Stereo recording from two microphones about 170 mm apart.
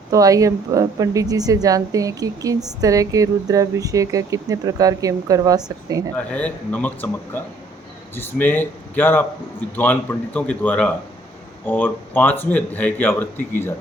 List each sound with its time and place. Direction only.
0.1 s speech: 20° right (ahead or behind)
6.1 s a man's voice: 10° left (ahead or behind)